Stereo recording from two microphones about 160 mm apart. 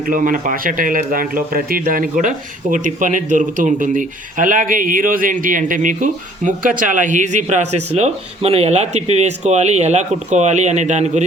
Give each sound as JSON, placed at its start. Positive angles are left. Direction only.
{"t": 0.1, "sound": "speech", "side_deg": -55}